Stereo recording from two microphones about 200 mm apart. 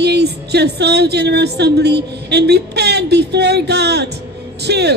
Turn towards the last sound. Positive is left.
turn(degrees=-55)  # may be behind; listen again after turning